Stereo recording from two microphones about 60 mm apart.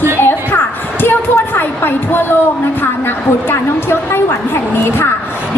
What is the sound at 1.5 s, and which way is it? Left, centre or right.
Speech, left.